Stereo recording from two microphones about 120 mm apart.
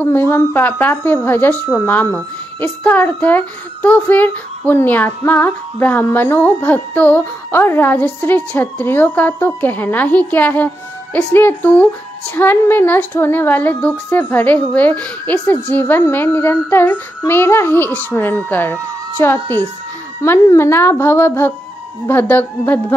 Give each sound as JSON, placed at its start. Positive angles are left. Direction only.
{"t": 0.0, "sound": "a woman's voice", "side_deg": 20}